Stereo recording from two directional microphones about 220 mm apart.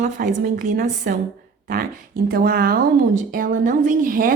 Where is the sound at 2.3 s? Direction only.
45° right (ahead or behind).